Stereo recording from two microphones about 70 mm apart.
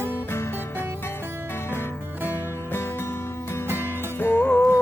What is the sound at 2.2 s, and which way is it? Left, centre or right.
Music, left.